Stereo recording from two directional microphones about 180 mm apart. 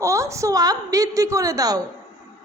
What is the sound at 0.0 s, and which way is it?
A woman's voice, 15° right (ahead or behind).